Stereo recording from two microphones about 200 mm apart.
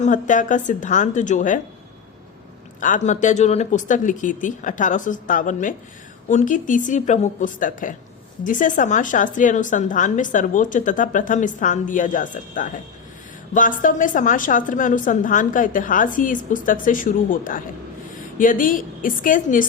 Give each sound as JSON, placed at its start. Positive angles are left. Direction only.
{"t": 0.0, "sound": "speech", "side_deg": 40}
{"t": 2.8, "sound": "a woman's voice", "side_deg": 40}